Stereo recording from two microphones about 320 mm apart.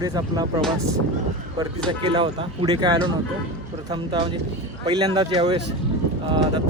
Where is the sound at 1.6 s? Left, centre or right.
Centre.